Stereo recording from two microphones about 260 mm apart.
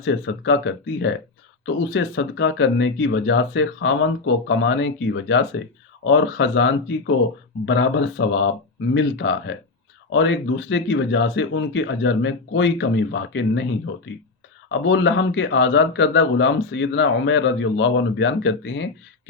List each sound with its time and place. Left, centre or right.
0.0 s speech: left